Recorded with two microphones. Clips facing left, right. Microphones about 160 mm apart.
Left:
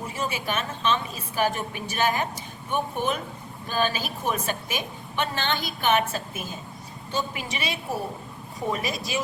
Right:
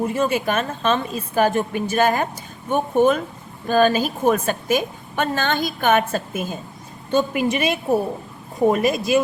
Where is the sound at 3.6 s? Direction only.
50° right (ahead or behind).